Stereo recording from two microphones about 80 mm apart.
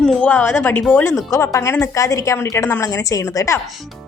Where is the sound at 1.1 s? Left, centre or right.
Left.